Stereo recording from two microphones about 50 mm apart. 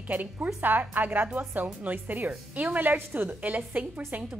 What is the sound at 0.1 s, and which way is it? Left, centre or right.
A woman's voice, right.